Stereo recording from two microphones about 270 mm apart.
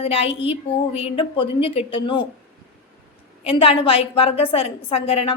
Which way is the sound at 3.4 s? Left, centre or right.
Left.